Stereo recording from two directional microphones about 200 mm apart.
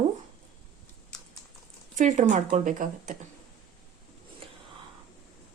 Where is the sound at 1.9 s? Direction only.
35° right (ahead or behind).